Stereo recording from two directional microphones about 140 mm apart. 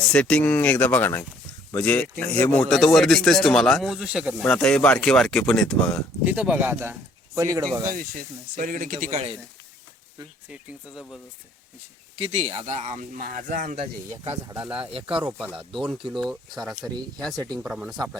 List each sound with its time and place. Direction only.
0.1 s speech: 5° left (ahead or behind)
4.4 s speech: 5° left (ahead or behind)
6.2 s speech: 10° right (ahead or behind); by 7.9 s 25° right (ahead or behind)
7.9 s speech: 90° right; by 9.4 s 55° right (ahead or behind)
10.5 s speech: 5° right (ahead or behind)
12.1 s speech: 45° right (ahead or behind); by 13.7 s 70° right (ahead or behind)
14.1 s speech: 20° right (ahead or behind)
14.5 s speech: 10° right (ahead or behind)
16.1 s speech: centre (ahead or behind)
16.9 s speech: 30° right (ahead or behind)
17.6 s speech: 10° right (ahead or behind)